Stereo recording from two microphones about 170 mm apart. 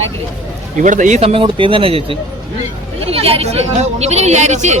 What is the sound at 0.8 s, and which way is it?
A woman's voice, 50° right (ahead or behind).